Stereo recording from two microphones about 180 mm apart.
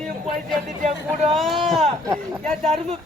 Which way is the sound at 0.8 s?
40° right (ahead or behind).